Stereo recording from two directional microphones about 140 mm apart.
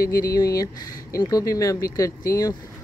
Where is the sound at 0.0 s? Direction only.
90° left.